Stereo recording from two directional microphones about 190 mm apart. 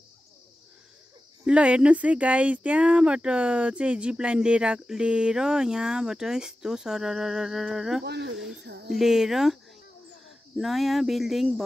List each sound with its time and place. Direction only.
1.4 s speech: 5° right (ahead or behind)
8.0 s speech: 60° right (ahead or behind)
8.4 s speech: 5° right (ahead or behind)
8.6 s speech: 60° right (ahead or behind)
8.9 s speech: centre (ahead or behind)
10.6 s speech: centre (ahead or behind)